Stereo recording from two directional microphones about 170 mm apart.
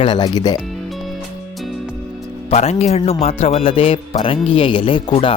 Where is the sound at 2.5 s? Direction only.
40° left (ahead or behind).